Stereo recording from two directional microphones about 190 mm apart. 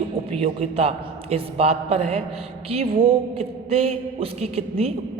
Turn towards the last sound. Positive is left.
turn(degrees=-30)  # may be behind; listen again after turning